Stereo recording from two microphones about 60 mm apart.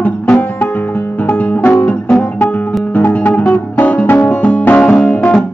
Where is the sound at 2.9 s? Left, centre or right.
Left.